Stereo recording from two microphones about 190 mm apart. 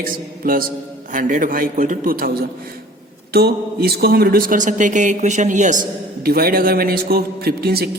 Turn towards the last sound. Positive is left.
turn(degrees=-55)  # may be behind; listen again after turning